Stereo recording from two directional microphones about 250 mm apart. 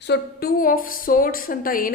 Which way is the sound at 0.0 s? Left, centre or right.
Left.